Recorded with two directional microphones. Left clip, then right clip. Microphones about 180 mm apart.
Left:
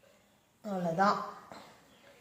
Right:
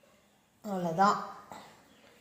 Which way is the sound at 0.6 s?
20° right (ahead or behind).